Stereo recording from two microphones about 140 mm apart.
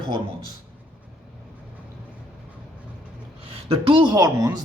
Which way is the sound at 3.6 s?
40° right (ahead or behind).